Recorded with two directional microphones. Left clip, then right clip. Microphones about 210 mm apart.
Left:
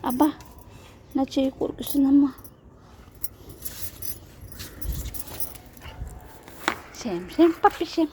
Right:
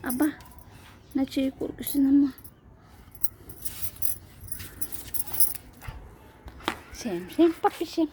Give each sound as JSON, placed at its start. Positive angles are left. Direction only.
{"t": 0.0, "sound": "speech", "side_deg": 5}
{"t": 6.9, "sound": "speech", "side_deg": -5}